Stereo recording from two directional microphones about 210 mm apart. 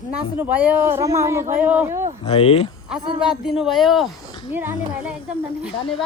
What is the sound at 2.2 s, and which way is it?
Speech, 30° left (ahead or behind).